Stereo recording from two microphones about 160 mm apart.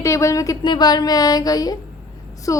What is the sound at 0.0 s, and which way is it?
A woman's voice, 20° left (ahead or behind).